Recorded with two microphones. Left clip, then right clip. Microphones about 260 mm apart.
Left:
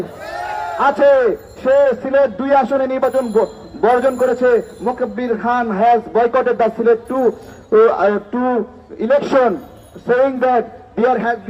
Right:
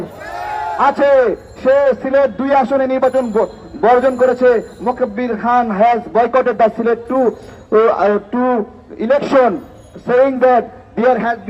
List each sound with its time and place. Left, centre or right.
0.8 s a man's voice: right